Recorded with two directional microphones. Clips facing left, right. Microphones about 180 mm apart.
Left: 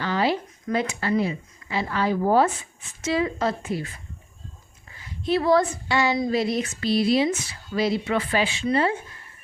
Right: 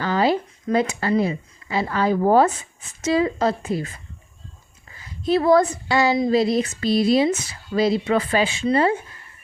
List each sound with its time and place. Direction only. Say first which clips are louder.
0.0 s speech: right 4 dB; 40° right (ahead or behind)
5.2 s speech: right 4 dB; 45° right (ahead or behind)